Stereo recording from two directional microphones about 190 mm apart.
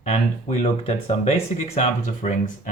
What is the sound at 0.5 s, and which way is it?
Speech, 30° left (ahead or behind).